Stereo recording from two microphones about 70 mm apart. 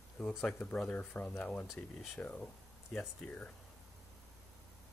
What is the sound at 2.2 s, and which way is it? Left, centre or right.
Speech, centre.